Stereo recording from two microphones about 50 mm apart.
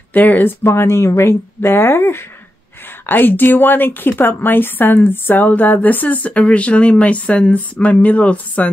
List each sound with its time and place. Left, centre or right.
0.1 s speech: left
0.7 s speech: left
3.1 s a woman's voice: left